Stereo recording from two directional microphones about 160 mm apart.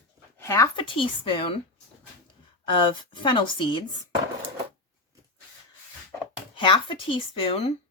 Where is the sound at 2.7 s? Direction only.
30° left (ahead or behind).